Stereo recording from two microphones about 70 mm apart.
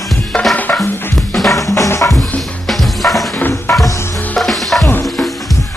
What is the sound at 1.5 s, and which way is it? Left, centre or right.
Drum kit, left.